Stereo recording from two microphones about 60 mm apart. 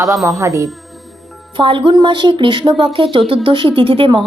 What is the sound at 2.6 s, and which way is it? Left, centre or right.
Speech, right.